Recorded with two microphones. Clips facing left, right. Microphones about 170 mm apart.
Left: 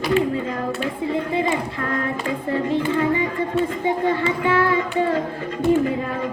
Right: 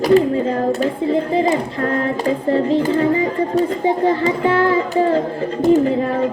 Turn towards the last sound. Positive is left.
turn(degrees=-30)  # may be behind; listen again after turning